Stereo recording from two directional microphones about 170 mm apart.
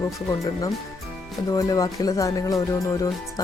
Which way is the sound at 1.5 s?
20° left (ahead or behind).